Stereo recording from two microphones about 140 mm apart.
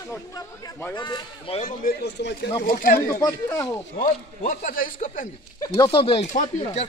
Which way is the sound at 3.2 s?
20° left (ahead or behind).